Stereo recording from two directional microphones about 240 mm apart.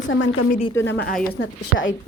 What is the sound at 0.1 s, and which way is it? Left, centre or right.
A woman's voice, left.